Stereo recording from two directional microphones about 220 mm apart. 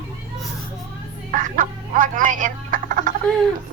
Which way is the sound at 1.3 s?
35° right (ahead or behind).